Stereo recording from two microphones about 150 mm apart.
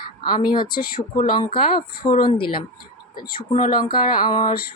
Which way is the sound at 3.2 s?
75° left (ahead or behind).